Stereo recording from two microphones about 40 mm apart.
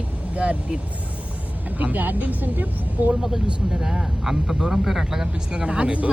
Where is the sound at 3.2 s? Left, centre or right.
Centre.